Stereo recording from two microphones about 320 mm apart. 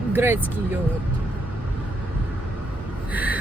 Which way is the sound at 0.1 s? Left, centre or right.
Centre.